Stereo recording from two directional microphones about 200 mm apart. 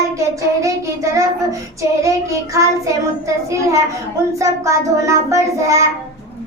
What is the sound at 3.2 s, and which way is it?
Child singing, 15° right (ahead or behind).